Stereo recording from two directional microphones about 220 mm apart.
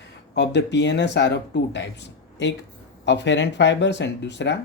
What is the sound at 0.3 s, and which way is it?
Speech, 50° left (ahead or behind).